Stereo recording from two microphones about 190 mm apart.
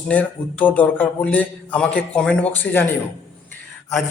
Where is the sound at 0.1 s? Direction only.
10° left (ahead or behind).